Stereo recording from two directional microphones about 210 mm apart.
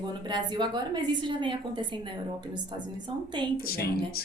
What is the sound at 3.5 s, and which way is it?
Speech, 45° left (ahead or behind).